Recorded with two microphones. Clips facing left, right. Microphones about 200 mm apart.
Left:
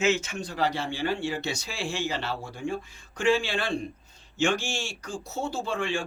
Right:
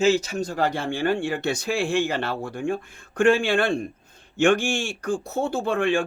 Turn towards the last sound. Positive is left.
turn(degrees=-55)  # may be behind; listen again after turning